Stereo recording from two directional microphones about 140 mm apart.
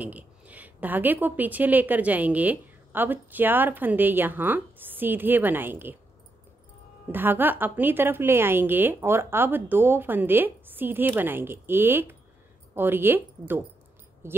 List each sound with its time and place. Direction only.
0.0 s a woman's voice: 10° right (ahead or behind)
7.1 s a woman's voice: 15° right (ahead or behind)